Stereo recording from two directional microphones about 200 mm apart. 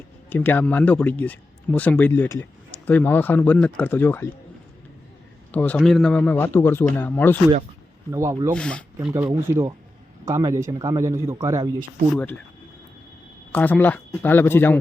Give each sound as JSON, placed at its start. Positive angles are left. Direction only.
{"t": 0.3, "sound": "speech", "side_deg": 10}
{"t": 5.5, "sound": "speech", "side_deg": 5}
{"t": 8.1, "sound": "a man's voice", "side_deg": -15}
{"t": 8.5, "sound": "speech", "side_deg": 5}
{"t": 9.0, "sound": "a man's voice", "side_deg": -15}
{"t": 12.1, "sound": "speech", "side_deg": 10}
{"t": 13.5, "sound": "speech", "side_deg": 10}